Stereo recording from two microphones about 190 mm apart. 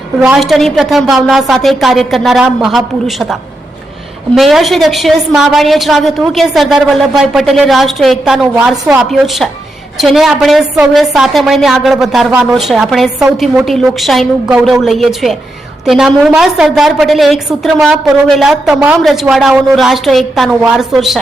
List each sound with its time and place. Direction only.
0.2 s a woman's voice: centre (ahead or behind)
4.4 s a woman's voice: centre (ahead or behind)